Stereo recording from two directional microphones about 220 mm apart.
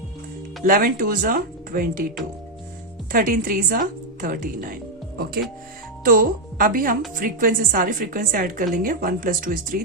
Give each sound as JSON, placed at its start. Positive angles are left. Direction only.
{"t": 0.6, "sound": "speech", "side_deg": -40}
{"t": 3.1, "sound": "a woman's voice", "side_deg": -40}